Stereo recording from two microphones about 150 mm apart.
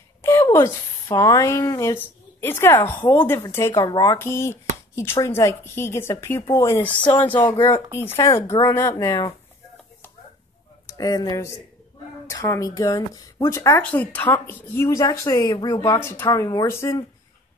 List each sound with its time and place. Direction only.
0.2 s a woman's voice: 20° left (ahead or behind)
4.2 s speech: 15° left (ahead or behind)
7.3 s speech: 30° left (ahead or behind)
8.4 s speech: 20° left (ahead or behind)
10.9 s speech: 25° left (ahead or behind)